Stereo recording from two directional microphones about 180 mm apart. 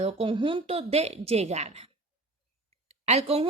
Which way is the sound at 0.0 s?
35° right (ahead or behind).